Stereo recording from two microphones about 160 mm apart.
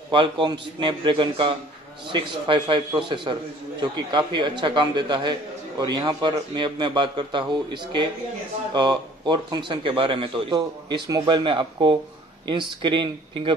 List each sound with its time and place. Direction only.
0.1 s a man's voice: 30° right (ahead or behind)